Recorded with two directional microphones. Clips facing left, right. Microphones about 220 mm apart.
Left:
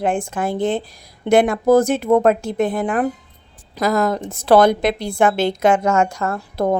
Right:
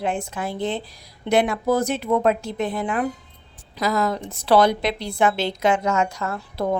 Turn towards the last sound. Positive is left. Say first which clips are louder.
# left 5 dB
turn(degrees=50)  # may be behind; listen again after turning